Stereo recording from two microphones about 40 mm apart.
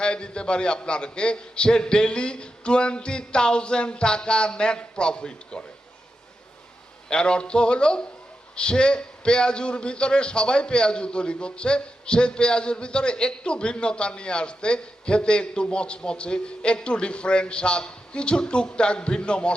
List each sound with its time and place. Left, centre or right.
0.0 s a man's voice: left
7.1 s a man's voice: left